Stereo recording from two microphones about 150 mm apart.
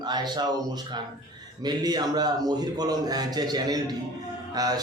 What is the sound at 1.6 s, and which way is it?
A man's voice, 25° right (ahead or behind).